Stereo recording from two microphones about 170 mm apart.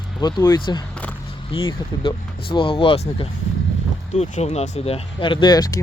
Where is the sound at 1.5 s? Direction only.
30° left (ahead or behind).